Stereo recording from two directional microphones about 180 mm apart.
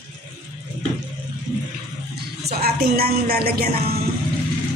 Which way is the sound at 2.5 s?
60° right (ahead or behind).